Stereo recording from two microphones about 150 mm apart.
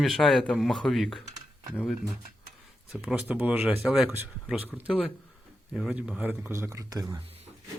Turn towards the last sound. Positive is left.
turn(degrees=-25)  # may be behind; listen again after turning